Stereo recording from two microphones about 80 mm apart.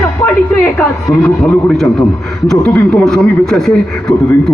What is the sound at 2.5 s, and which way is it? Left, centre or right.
Speech, centre.